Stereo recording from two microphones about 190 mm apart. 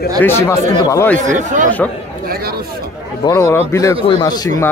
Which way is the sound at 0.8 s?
15° left (ahead or behind).